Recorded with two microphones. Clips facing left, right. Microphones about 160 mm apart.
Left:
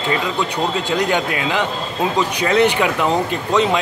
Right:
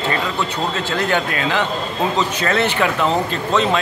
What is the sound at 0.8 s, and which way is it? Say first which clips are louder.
Speech: even; 15° left (ahead or behind).